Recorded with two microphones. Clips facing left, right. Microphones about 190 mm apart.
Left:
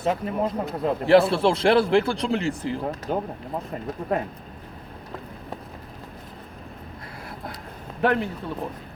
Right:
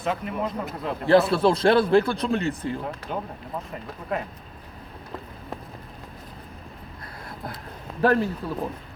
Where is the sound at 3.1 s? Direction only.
45° left (ahead or behind).